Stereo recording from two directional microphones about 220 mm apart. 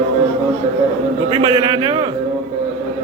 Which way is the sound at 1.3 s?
25° right (ahead or behind).